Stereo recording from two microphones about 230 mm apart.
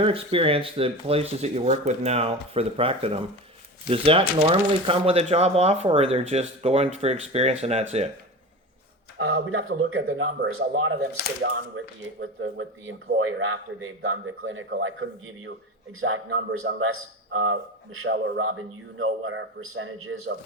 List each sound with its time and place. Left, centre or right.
0.0 s speech: right
9.1 s a man's voice: right
12.2 s a man's voice: right